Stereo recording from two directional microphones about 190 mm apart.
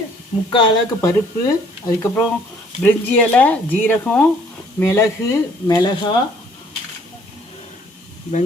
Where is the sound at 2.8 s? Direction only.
10° left (ahead or behind); by 6.2 s 25° left (ahead or behind).